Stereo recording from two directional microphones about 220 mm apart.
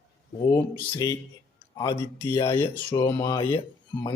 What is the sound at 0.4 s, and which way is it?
Speech, 15° left (ahead or behind).